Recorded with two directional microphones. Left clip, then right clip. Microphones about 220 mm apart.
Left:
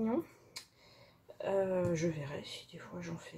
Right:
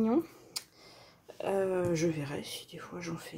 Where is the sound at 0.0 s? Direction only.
45° right (ahead or behind).